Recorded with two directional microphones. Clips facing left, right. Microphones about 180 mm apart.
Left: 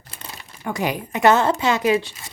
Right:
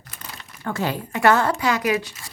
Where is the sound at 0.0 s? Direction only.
30° left (ahead or behind).